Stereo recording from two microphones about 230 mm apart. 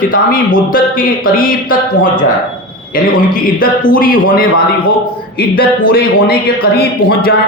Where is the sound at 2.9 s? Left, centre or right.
Left.